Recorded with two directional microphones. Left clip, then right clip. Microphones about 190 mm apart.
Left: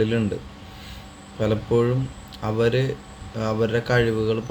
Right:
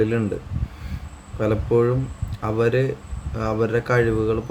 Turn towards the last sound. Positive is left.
turn(degrees=-10)  # may be behind; listen again after turning